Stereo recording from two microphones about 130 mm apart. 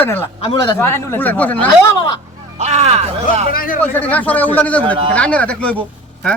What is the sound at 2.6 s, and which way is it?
Speech, 55° right (ahead or behind).